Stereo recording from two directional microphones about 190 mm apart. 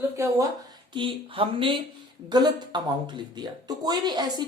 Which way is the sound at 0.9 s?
25° right (ahead or behind).